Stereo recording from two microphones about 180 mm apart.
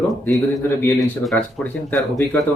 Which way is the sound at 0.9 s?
Centre (ahead or behind).